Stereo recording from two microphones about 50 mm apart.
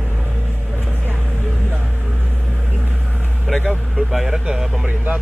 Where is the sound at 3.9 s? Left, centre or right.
Centre.